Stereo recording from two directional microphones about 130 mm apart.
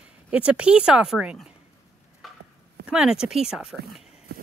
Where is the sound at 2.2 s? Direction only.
Centre (ahead or behind).